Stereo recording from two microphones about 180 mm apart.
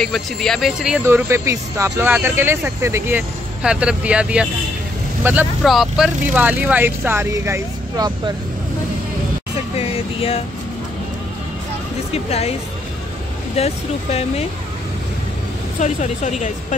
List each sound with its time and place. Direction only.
0.0 s speech: 5° left (ahead or behind)
5.6 s speech: centre (ahead or behind)
9.8 s music: 30° left (ahead or behind)
12.1 s speech: 35° left (ahead or behind)
13.6 s speech: 35° left (ahead or behind)
15.8 s speech: 40° left (ahead or behind)